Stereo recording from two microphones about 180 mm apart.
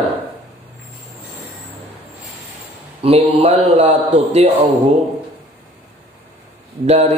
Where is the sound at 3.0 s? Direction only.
35° right (ahead or behind).